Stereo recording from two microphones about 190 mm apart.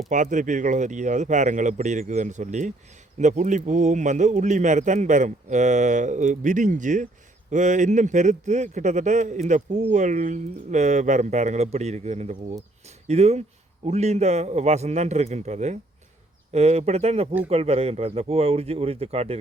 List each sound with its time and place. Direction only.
0.1 s speech: 40° right (ahead or behind)